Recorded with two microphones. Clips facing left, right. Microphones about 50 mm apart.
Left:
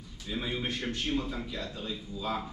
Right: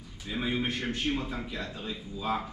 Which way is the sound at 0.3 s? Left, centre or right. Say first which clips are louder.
Right 3 dB; centre.